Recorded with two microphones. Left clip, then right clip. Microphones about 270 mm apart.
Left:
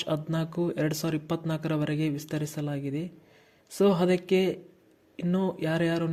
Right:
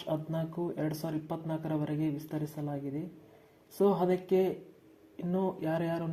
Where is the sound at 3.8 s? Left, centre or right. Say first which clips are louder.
Left 4 dB; left.